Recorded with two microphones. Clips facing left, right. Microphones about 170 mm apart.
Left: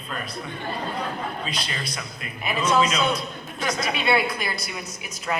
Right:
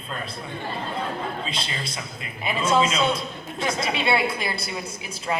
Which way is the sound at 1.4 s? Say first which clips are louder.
Even; 25° right (ahead or behind).